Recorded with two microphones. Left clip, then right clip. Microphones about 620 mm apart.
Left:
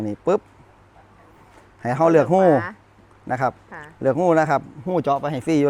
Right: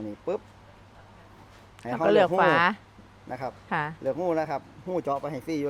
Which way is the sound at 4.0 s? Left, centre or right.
Left.